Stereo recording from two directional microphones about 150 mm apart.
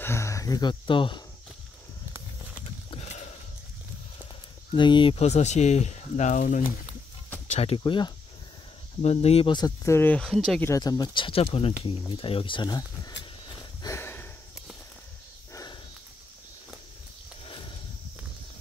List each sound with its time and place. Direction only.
0.0 s speech: 20° left (ahead or behind); by 1.2 s 35° left (ahead or behind)
2.9 s a sound: 45° left (ahead or behind)
4.7 s speech: 30° left (ahead or behind); by 6.6 s 60° left (ahead or behind)
7.4 s speech: 45° left (ahead or behind)
9.8 s speech: 15° left (ahead or behind)
10.6 s speech: 25° left (ahead or behind)
13.6 s a sound: 20° left (ahead or behind)
15.5 s dog: 25° left (ahead or behind)
17.5 s a sound: 35° left (ahead or behind)